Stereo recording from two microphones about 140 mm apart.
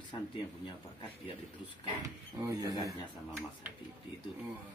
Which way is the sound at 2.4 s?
25° right (ahead or behind).